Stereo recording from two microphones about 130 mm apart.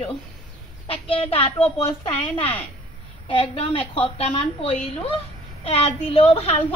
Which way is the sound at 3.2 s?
45° left (ahead or behind).